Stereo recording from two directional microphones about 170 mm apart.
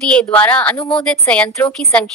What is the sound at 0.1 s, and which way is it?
A woman's voice, 10° left (ahead or behind).